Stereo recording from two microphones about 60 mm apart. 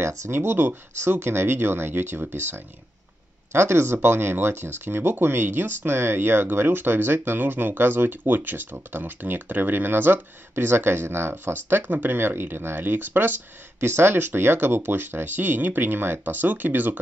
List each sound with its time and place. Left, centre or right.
0.0 s speech: right
0.3 s speech: right